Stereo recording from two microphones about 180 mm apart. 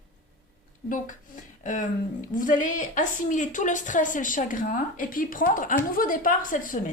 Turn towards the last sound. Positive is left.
turn(degrees=50)  # may be behind; listen again after turning